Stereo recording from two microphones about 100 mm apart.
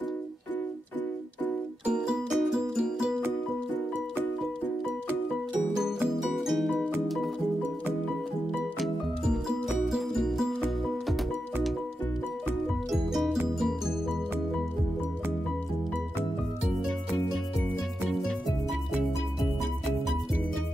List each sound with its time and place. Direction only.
1.9 s music: 5° right (ahead or behind)
5.8 s music: 5° right (ahead or behind)
8.7 s music: centre (ahead or behind)
12.9 s music: centre (ahead or behind)